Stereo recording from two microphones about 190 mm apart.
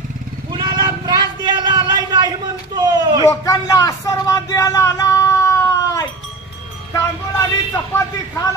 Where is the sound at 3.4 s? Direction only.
20° left (ahead or behind).